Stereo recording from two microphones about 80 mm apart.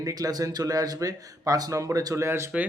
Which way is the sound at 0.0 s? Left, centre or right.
Right.